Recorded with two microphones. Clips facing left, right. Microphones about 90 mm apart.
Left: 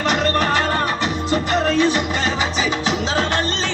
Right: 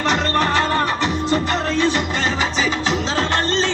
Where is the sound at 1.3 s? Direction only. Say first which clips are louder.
Left 5 dB; 15° left (ahead or behind).